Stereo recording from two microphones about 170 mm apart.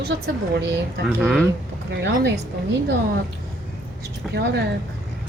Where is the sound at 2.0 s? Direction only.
90° right.